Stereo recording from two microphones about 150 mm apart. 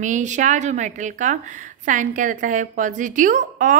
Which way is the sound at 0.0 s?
55° right (ahead or behind).